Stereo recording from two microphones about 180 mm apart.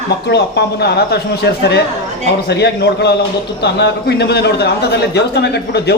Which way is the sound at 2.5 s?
70° left (ahead or behind).